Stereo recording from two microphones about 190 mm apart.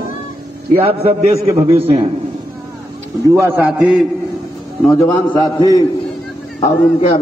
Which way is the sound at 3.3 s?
10° right (ahead or behind).